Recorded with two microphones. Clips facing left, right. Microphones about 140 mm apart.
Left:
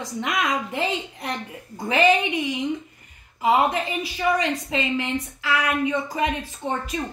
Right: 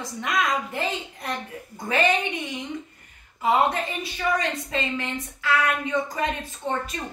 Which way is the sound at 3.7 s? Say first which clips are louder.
Left 3 dB; 15° left (ahead or behind).